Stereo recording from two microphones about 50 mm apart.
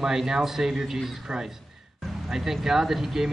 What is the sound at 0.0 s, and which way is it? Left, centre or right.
Speech, centre.